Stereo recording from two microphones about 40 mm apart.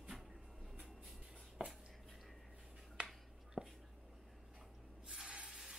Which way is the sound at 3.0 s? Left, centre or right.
Right.